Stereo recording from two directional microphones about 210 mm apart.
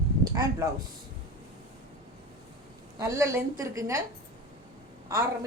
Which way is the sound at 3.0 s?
15° right (ahead or behind).